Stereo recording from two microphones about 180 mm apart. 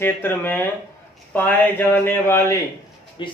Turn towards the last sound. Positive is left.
turn(degrees=25)  # may be behind; listen again after turning